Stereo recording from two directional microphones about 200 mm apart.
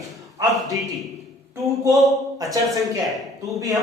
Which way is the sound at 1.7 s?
15° right (ahead or behind).